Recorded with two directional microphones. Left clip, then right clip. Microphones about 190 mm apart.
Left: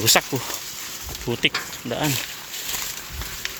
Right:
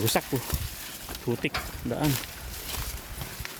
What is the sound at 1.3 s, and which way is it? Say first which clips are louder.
Speech: left 8 dB; 5° left (ahead or behind).